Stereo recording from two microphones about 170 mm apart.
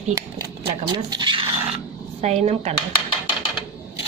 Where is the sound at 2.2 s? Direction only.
40° right (ahead or behind).